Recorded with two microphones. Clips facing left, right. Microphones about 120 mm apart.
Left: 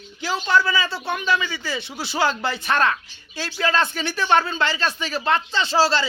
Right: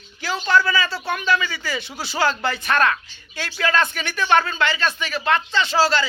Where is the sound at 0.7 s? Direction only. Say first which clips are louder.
Right 1 dB; 25° left (ahead or behind).